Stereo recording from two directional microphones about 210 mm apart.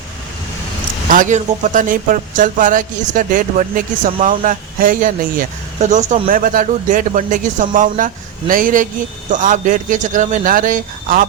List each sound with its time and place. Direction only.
1.0 s speech: 40° right (ahead or behind)